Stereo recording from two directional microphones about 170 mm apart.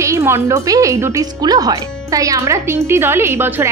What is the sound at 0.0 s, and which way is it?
A woman's voice, 15° right (ahead or behind).